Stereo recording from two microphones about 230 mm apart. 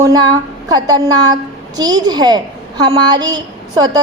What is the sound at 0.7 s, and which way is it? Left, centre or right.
A woman's voice, centre.